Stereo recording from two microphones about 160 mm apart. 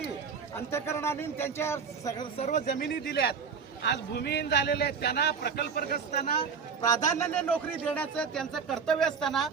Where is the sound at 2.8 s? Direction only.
85° left.